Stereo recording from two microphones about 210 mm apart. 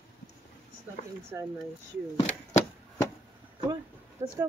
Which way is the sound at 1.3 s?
10° right (ahead or behind).